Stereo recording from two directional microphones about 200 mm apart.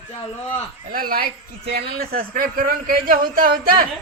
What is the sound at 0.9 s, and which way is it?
Speech, 45° right (ahead or behind).